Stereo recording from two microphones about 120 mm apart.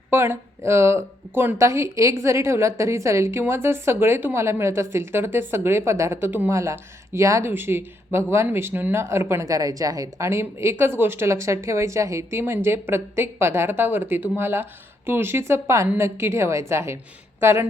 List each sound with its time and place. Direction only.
0.1 s a woman's voice: 20° right (ahead or behind)